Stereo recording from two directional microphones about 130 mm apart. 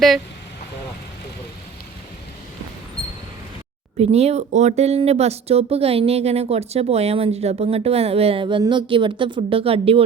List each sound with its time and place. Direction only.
3.9 s a woman's voice: 50° right (ahead or behind)